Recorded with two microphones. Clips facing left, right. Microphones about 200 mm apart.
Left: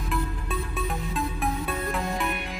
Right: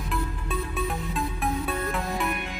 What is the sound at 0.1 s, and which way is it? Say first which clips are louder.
Music: left 1 dB; centre (ahead or behind).